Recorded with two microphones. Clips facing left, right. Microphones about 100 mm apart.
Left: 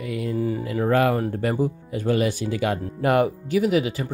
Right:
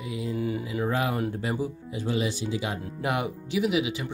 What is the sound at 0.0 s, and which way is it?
Speech, 60° left (ahead or behind).